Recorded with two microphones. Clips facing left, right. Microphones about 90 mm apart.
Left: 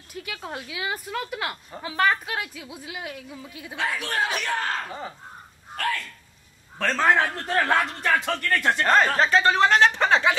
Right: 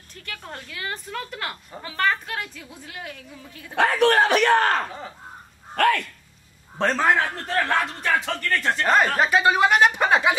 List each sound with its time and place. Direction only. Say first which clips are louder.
0.1 s a woman's voice: left 3 dB; 10° left (ahead or behind)
3.7 s speech: right 10 dB; 60° right (ahead or behind)
7.0 s speech: left 3 dB; centre (ahead or behind)
8.8 s speech: right 1 dB; 10° right (ahead or behind)